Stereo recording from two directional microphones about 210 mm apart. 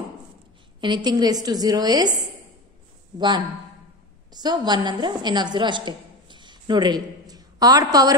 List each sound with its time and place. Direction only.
0.7 s a woman's voice: 20° right (ahead or behind)